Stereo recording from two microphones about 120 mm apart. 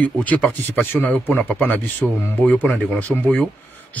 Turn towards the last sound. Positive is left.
turn(degrees=10)  # may be behind; listen again after turning